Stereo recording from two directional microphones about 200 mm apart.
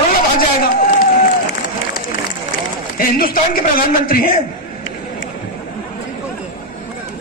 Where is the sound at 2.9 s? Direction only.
45° left (ahead or behind).